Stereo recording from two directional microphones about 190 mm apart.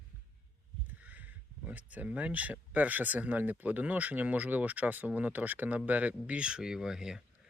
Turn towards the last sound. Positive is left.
turn(degrees=0)  # may be behind; listen again after turning